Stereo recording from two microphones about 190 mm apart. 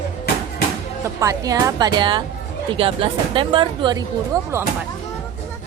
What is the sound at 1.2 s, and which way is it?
A woman's voice, 20° right (ahead or behind).